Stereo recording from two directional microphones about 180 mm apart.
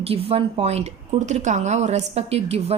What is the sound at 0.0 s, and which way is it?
Speech, 30° right (ahead or behind).